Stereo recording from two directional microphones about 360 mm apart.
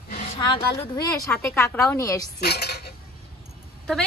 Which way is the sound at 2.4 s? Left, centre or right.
Left.